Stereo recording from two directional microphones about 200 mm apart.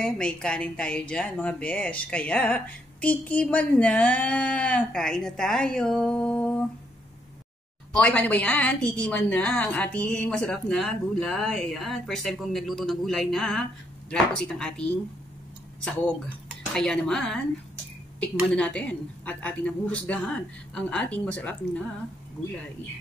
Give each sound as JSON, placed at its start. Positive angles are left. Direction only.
{"t": 0.0, "sound": "a woman's voice", "side_deg": 5}
{"t": 7.9, "sound": "a woman's voice", "side_deg": 5}
{"t": 18.5, "sound": "a woman's voice", "side_deg": 5}